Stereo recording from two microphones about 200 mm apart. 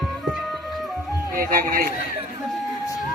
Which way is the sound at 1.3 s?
45° right (ahead or behind).